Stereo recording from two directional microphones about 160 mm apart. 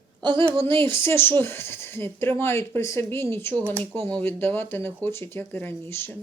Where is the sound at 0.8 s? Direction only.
15° left (ahead or behind).